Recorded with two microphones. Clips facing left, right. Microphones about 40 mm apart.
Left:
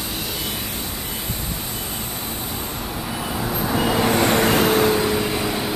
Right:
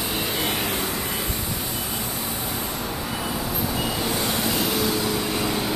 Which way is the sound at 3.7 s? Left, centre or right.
Left.